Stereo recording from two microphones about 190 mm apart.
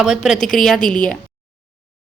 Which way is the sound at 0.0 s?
5° right (ahead or behind).